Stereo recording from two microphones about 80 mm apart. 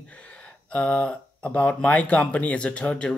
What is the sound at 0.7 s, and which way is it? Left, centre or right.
Speech, centre.